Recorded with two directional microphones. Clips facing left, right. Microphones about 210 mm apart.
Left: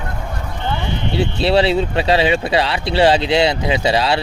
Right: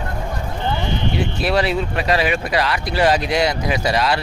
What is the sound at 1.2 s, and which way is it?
Speech, 30° left (ahead or behind).